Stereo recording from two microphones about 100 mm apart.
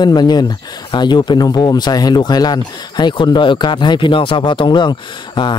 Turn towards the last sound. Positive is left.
turn(degrees=50)  # may be behind; listen again after turning